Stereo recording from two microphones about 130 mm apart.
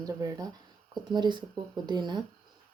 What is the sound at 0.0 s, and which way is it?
Speech, 30° right (ahead or behind).